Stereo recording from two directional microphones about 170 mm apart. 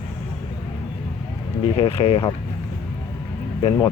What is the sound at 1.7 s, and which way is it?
Speech, 35° left (ahead or behind).